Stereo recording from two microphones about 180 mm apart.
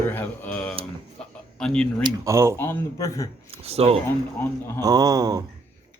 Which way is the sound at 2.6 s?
15° left (ahead or behind).